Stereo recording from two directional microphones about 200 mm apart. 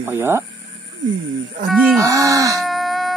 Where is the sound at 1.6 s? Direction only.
Centre (ahead or behind).